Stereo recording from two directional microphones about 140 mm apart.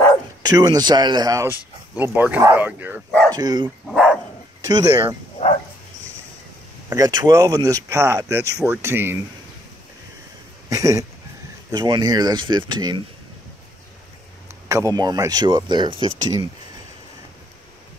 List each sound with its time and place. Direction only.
0.5 s speech: 25° right (ahead or behind)
3.3 s speech: 30° right (ahead or behind)
3.8 s dog: centre (ahead or behind)
4.6 s speech: 25° right (ahead or behind)
6.9 s speech: 30° right (ahead or behind)
10.7 s speech: 25° right (ahead or behind)
14.7 s speech: 25° right (ahead or behind)